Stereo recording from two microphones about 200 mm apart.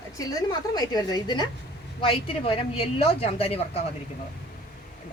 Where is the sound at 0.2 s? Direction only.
20° left (ahead or behind).